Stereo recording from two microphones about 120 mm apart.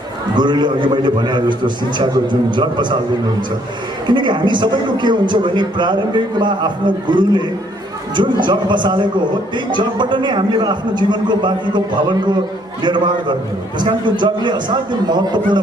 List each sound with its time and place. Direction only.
0.3 s a man's voice: 40° right (ahead or behind)
4.0 s a man's voice: 40° right (ahead or behind)